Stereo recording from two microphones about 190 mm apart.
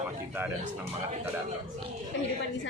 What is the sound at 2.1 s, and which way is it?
Speech, 75° left (ahead or behind).